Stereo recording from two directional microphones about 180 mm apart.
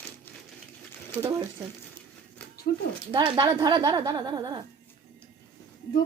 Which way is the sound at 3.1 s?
25° right (ahead or behind).